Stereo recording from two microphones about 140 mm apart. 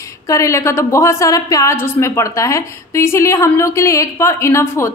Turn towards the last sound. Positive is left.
turn(degrees=20)  # may be behind; listen again after turning